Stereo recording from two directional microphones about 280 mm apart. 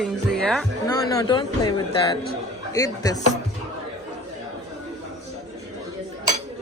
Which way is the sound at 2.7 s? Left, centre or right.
Centre.